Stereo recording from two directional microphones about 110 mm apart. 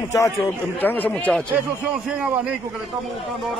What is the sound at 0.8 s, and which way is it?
Speech, 15° left (ahead or behind).